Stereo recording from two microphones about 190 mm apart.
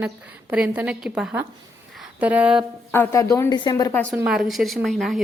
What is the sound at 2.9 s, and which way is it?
A woman's voice, 15° left (ahead or behind).